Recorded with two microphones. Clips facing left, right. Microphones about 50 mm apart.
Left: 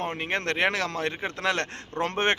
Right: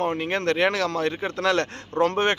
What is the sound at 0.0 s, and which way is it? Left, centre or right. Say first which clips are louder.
Speech: right 5 dB; left.